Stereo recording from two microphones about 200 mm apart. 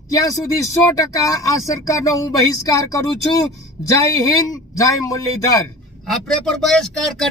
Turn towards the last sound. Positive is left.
turn(degrees=0)  # may be behind; listen again after turning